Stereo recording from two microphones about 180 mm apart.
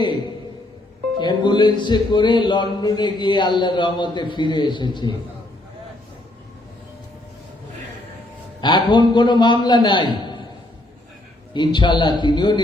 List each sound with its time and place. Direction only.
1.2 s speech: 25° left (ahead or behind)
8.6 s speech: 25° left (ahead or behind)
11.5 s speech: 25° left (ahead or behind)